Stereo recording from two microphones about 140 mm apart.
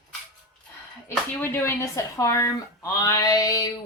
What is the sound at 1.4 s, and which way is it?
A woman's voice, 20° left (ahead or behind).